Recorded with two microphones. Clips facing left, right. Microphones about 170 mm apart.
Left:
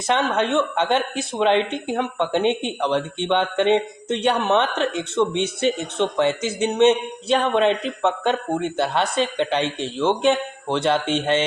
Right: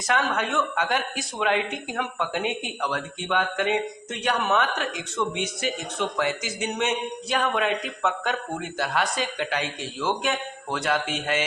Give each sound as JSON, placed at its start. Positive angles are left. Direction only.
{"t": 0.1, "sound": "speech", "side_deg": 25}